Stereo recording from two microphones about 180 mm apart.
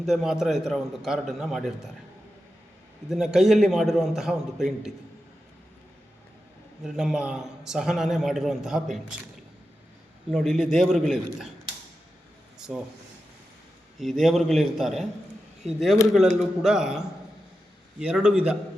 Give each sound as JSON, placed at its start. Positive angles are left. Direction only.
{"t": 0.0, "sound": "a man's voice", "side_deg": 0}
{"t": 3.1, "sound": "a man's voice", "side_deg": 0}
{"t": 6.8, "sound": "a man's voice", "side_deg": -5}
{"t": 10.3, "sound": "a man's voice", "side_deg": 0}
{"t": 12.5, "sound": "a sound", "side_deg": -5}
{"t": 14.0, "sound": "a man's voice", "side_deg": 0}
{"t": 18.0, "sound": "a man's voice", "side_deg": -5}